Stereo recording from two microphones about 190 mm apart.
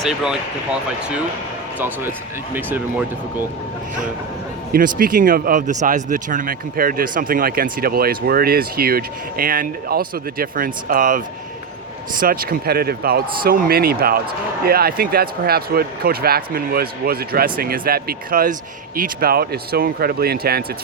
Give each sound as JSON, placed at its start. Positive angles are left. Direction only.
{"t": 0.0, "sound": "speech", "side_deg": -5}
{"t": 4.7, "sound": "speech", "side_deg": -50}
{"t": 12.2, "sound": "speech", "side_deg": -50}